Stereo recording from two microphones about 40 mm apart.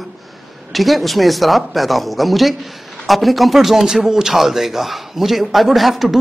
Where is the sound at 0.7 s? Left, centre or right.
Centre.